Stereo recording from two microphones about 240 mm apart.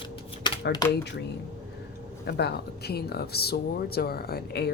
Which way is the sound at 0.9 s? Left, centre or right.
Left.